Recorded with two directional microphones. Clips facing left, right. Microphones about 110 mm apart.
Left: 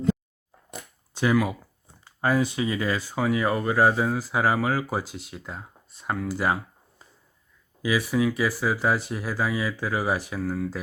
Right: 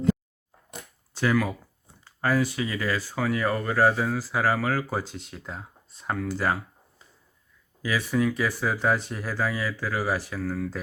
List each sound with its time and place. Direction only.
1.1 s speech: 15° left (ahead or behind)
7.8 s speech: 10° left (ahead or behind)